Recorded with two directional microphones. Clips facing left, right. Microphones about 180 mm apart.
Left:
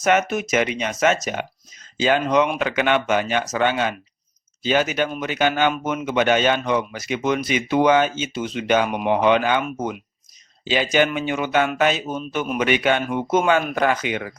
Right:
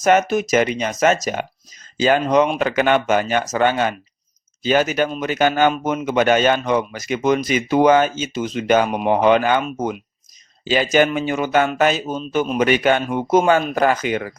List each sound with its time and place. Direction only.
0.0 s a man's voice: 35° right (ahead or behind)